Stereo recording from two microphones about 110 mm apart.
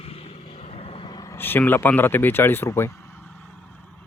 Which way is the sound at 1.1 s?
40° left (ahead or behind).